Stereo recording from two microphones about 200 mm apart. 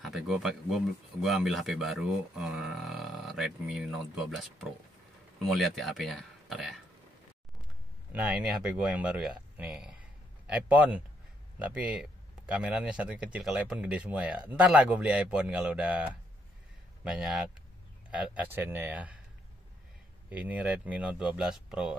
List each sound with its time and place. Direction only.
0.0 s speech: centre (ahead or behind)
8.1 s speech: 5° right (ahead or behind)
20.2 s speech: 10° right (ahead or behind)